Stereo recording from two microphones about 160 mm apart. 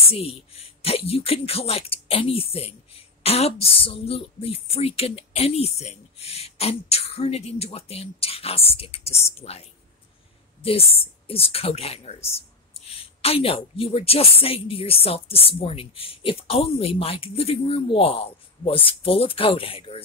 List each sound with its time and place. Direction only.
0.1 s a woman's voice: 40° left (ahead or behind)
10.6 s a woman's voice: 35° left (ahead or behind)